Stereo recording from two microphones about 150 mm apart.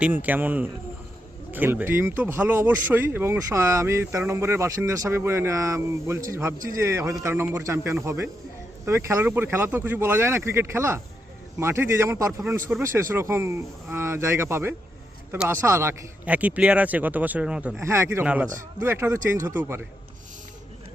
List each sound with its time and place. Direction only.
0.0 s speech: 10° right (ahead or behind)
17.7 s speech: 20° right (ahead or behind)